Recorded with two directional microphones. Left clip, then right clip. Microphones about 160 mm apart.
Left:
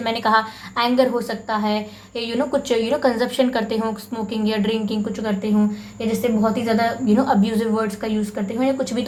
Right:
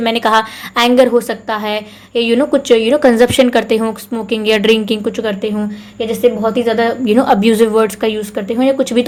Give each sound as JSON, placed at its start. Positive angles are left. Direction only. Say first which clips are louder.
{"t": 0.0, "sound": "a woman's voice", "louder": "right 6 dB", "side_deg": -40}